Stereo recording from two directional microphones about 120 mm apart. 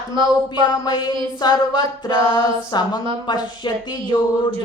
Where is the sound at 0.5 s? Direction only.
35° left (ahead or behind).